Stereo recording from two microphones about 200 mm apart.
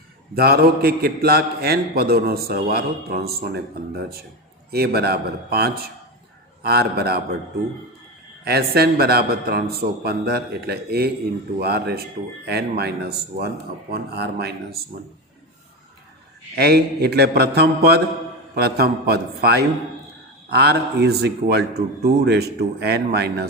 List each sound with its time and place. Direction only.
0.3 s a man's voice: 50° right (ahead or behind)
8.4 s a man's voice: 50° right (ahead or behind)
16.6 s a man's voice: 55° right (ahead or behind)